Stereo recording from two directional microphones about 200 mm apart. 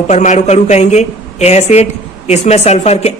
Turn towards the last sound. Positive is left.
turn(degrees=30)  # may be behind; listen again after turning